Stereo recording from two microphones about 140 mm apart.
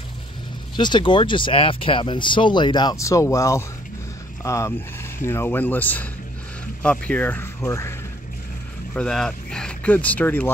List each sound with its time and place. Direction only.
0.7 s speech: 35° left (ahead or behind); by 7.9 s 20° left (ahead or behind)
8.9 s speech: 5° left (ahead or behind)